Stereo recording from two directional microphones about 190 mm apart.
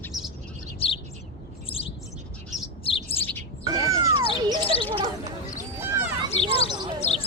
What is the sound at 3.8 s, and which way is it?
Music, 15° right (ahead or behind).